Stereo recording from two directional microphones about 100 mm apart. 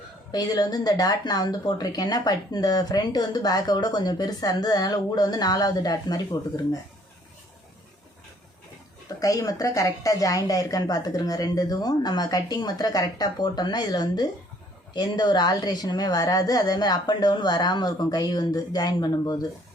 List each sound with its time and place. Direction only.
0.3 s speech: 40° left (ahead or behind)
9.0 s a woman's voice: 35° left (ahead or behind)